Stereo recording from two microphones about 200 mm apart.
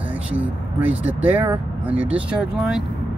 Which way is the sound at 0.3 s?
5° right (ahead or behind).